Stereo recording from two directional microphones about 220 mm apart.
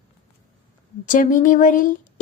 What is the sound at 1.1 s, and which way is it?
Speech, 35° left (ahead or behind).